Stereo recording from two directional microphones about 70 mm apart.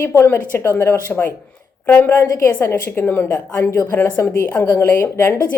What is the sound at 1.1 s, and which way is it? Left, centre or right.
Speech, centre.